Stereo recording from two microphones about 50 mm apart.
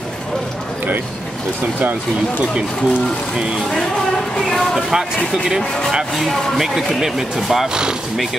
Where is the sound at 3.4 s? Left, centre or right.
Centre.